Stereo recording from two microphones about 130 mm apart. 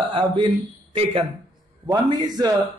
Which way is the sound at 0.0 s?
40° right (ahead or behind).